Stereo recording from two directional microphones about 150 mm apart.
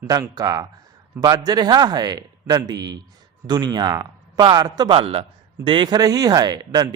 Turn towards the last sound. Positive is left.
turn(degrees=-30)  # may be behind; listen again after turning